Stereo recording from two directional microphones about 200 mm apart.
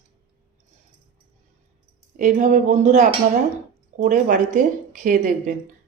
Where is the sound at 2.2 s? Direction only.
40° right (ahead or behind).